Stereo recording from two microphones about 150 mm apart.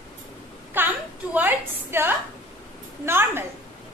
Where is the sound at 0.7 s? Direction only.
15° right (ahead or behind).